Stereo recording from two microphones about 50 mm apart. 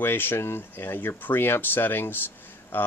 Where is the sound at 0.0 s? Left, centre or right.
Left.